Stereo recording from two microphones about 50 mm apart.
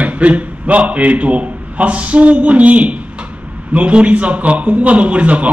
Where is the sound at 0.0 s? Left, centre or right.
Right.